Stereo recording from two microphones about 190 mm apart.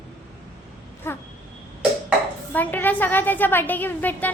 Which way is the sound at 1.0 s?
15° left (ahead or behind).